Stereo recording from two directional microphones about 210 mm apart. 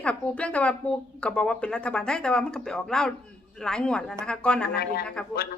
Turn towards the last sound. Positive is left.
turn(degrees=5)  # may be behind; listen again after turning